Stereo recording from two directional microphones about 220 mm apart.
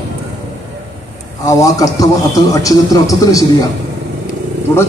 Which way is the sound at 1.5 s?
15° left (ahead or behind).